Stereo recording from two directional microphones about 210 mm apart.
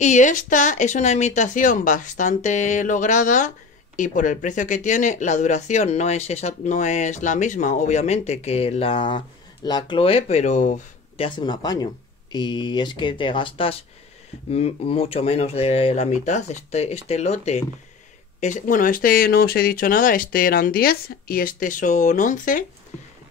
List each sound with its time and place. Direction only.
0.0 s speech: 35° left (ahead or behind)
11.2 s speech: 20° left (ahead or behind); by 22.7 s 40° left (ahead or behind)